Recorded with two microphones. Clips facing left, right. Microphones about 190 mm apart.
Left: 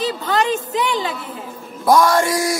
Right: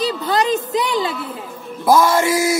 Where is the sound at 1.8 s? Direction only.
Centre (ahead or behind).